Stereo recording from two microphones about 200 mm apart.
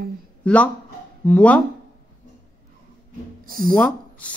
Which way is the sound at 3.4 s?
45° right (ahead or behind).